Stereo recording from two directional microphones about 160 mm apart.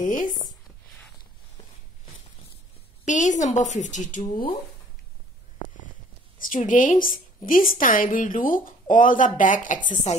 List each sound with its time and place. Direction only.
0.0 s speech: 55° left (ahead or behind)
3.1 s a woman's voice: 50° left (ahead or behind)
6.3 s a woman's voice: 60° left (ahead or behind)
10.1 s a woman's voice: 45° left (ahead or behind)